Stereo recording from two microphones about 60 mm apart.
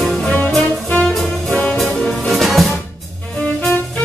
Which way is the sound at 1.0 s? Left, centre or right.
Centre.